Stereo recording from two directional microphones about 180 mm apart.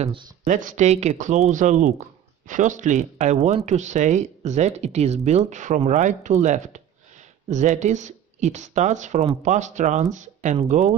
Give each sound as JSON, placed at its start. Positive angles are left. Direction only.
{"t": 0.0, "sound": "speech", "side_deg": -30}
{"t": 0.5, "sound": "speech", "side_deg": -45}